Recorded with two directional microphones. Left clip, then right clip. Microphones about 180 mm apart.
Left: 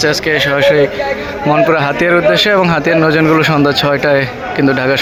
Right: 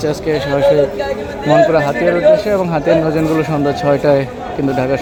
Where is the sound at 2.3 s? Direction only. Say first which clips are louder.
Left 4 dB; centre (ahead or behind).